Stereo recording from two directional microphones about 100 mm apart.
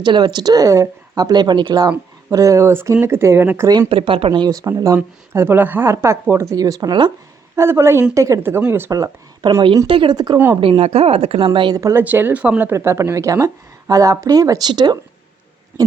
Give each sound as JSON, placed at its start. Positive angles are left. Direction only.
{"t": 0.0, "sound": "a woman's voice", "side_deg": -45}
{"t": 2.3, "sound": "speech", "side_deg": -35}
{"t": 3.7, "sound": "speech", "side_deg": -55}
{"t": 4.6, "sound": "speech", "side_deg": -35}
{"t": 7.5, "sound": "speech", "side_deg": -25}
{"t": 9.4, "sound": "speech", "side_deg": -40}
{"t": 9.8, "sound": "speech", "side_deg": -60}
{"t": 10.3, "sound": "speech", "side_deg": -20}
{"t": 10.6, "sound": "a woman's voice", "side_deg": -80}
{"t": 11.7, "sound": "speech", "side_deg": -30}
{"t": 12.0, "sound": "speech", "side_deg": -20}
{"t": 12.7, "sound": "speech", "side_deg": -30}